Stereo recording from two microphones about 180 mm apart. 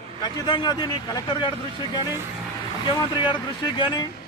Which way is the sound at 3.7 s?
25° left (ahead or behind).